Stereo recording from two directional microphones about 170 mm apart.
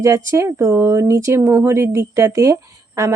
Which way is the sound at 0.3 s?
15° right (ahead or behind).